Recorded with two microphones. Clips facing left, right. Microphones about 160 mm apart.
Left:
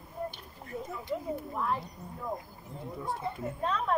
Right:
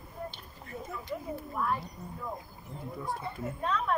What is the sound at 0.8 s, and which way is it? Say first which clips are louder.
Speech: left 2 dB; 20° left (ahead or behind).